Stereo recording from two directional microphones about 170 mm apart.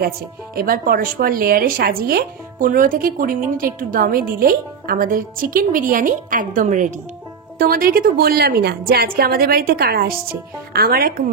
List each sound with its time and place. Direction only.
0.6 s a woman's voice: 55° right (ahead or behind)